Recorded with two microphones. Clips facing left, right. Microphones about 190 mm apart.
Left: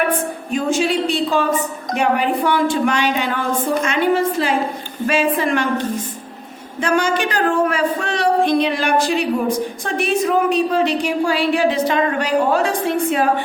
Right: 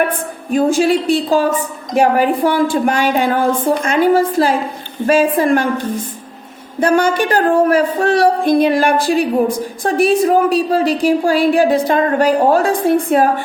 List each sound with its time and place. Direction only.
0.1 s a woman's voice: 50° right (ahead or behind)
6.7 s a man's voice: 55° right (ahead or behind)
9.8 s a woman's voice: 35° right (ahead or behind)